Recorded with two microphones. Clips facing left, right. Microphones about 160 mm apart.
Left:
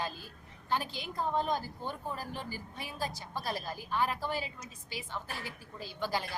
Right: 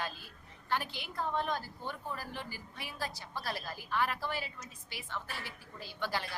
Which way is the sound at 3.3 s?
15° left (ahead or behind).